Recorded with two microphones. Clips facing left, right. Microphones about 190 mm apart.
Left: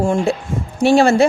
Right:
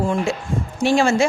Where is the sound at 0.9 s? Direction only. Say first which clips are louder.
Left 5 dB; 35° left (ahead or behind).